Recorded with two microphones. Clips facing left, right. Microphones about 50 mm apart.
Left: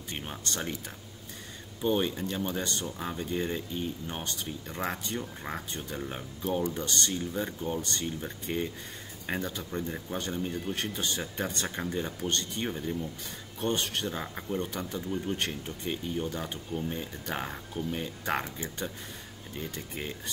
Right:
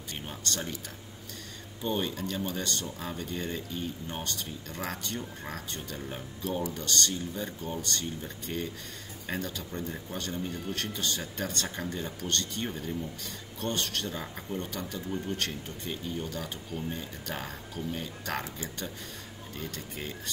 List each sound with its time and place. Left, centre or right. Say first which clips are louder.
0.1 s speech: even; centre
1.8 s speech: left 3 dB; centre
19.7 s speech: left 1 dB; centre